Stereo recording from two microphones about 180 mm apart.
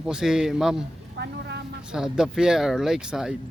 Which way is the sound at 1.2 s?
70° right (ahead or behind).